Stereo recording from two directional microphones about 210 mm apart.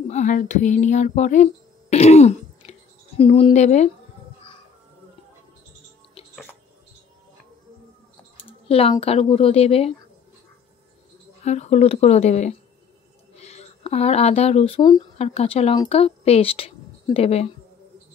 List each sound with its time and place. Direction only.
0.1 s speech: 35° left (ahead or behind)
8.6 s a woman's voice: 25° left (ahead or behind)
11.4 s speech: 30° left (ahead or behind)